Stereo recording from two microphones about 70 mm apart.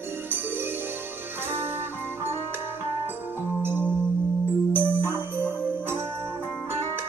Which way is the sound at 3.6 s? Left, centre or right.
Right.